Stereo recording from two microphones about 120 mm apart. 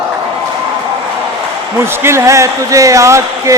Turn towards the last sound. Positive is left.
turn(degrees=-25)  # may be behind; listen again after turning